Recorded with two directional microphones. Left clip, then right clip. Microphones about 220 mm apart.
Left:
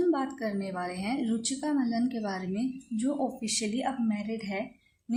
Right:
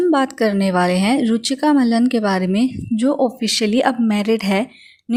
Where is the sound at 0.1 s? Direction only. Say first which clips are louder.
Right 13 dB; 40° right (ahead or behind).